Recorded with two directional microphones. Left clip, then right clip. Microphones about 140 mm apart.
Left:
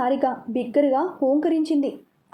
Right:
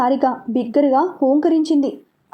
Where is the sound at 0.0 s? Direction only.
35° right (ahead or behind).